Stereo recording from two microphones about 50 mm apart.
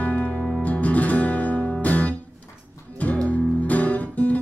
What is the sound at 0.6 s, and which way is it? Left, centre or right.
Music, left.